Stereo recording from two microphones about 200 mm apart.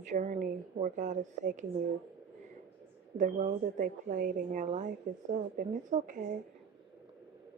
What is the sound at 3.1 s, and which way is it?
Speech, 35° right (ahead or behind).